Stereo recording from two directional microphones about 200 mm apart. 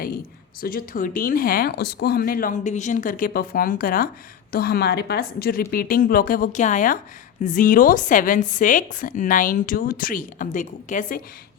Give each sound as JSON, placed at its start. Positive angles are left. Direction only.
{"t": 0.6, "sound": "a woman's voice", "side_deg": 45}